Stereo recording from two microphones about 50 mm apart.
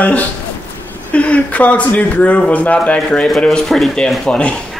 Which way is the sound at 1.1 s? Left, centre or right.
Left.